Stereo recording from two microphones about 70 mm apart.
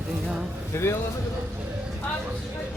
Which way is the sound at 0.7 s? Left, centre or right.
Left.